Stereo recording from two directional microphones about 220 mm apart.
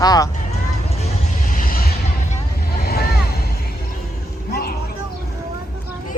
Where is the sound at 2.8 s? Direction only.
45° left (ahead or behind).